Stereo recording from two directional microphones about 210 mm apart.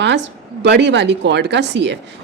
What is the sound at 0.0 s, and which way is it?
A woman's voice, 55° right (ahead or behind).